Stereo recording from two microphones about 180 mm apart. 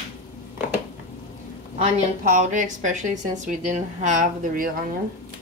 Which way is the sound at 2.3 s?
45° right (ahead or behind).